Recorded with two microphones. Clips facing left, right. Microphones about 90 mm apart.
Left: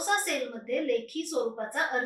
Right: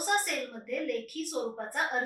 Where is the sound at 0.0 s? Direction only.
Centre (ahead or behind).